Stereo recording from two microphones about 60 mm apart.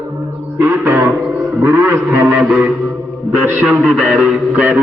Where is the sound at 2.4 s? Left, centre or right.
Right.